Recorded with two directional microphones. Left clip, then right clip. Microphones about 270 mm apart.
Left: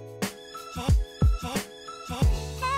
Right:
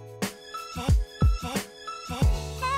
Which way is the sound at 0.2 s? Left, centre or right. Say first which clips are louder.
Right 1 dB; centre.